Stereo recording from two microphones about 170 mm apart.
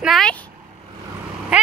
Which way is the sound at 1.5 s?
5° right (ahead or behind).